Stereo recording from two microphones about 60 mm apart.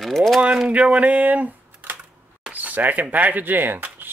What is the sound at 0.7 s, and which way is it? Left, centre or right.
Speech, centre.